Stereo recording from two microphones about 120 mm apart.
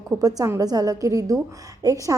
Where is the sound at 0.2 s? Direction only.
30° right (ahead or behind).